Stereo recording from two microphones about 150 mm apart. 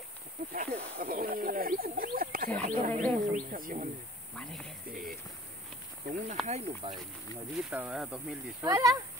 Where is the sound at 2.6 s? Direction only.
65° right (ahead or behind).